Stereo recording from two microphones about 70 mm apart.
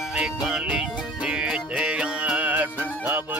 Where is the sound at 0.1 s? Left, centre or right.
Centre.